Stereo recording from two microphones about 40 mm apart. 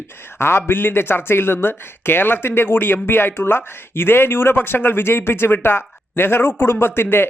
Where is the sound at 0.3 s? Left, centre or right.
Left.